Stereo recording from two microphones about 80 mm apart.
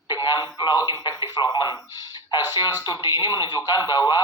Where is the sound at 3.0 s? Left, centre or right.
Left.